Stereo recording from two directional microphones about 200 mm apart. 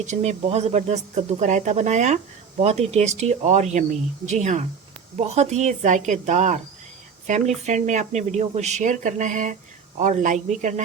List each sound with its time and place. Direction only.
0.0 s speech: 35° right (ahead or behind)